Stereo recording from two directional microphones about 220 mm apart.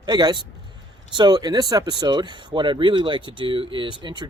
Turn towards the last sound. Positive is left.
turn(degrees=-20)  # may be behind; listen again after turning